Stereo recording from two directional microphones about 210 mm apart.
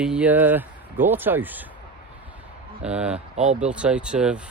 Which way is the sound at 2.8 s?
5° right (ahead or behind).